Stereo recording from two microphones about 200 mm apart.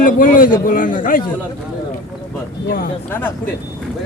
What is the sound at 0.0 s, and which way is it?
A man's voice, 45° left (ahead or behind).